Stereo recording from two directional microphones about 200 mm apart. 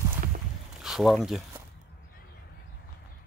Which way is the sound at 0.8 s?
Centre (ahead or behind).